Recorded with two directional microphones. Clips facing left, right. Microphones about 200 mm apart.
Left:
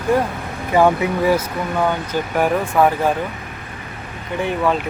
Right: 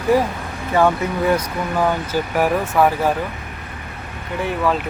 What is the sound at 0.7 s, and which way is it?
Speech, 15° left (ahead or behind).